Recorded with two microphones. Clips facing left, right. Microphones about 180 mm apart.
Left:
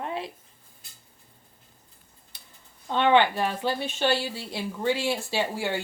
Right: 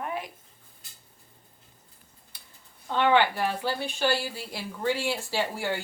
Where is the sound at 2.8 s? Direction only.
20° left (ahead or behind).